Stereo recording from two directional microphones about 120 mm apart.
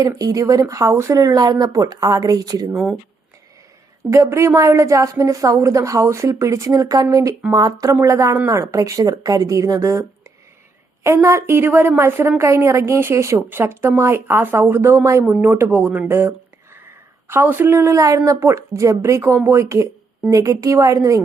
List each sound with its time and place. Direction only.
0.0 s a woman's voice: 30° right (ahead or behind)
2.6 s speech: 10° right (ahead or behind)
4.1 s a woman's voice: 25° right (ahead or behind)